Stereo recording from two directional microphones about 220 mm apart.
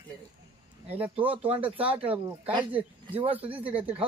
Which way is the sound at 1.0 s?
5° right (ahead or behind).